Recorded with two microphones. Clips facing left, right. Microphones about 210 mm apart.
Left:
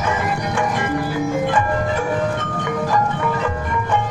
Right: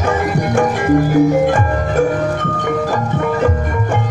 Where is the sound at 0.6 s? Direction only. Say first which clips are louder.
Right 10 dB; 45° right (ahead or behind).